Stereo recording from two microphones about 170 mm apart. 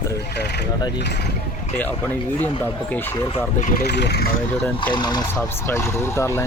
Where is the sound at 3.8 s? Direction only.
80° left.